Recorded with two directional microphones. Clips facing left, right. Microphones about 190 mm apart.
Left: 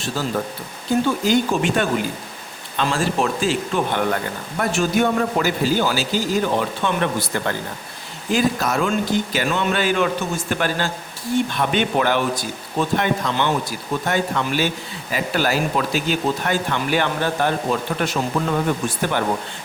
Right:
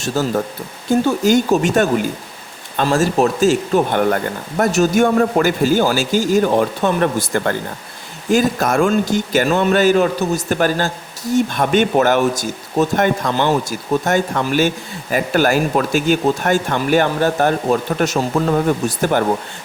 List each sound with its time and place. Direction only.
0.2 s speech: 45° right (ahead or behind)